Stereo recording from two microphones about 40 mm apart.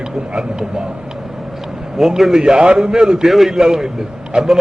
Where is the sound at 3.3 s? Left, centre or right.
Centre.